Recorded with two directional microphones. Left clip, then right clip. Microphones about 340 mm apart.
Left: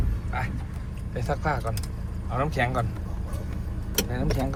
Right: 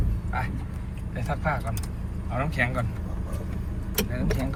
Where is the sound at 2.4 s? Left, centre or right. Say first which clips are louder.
Left 1 dB; centre.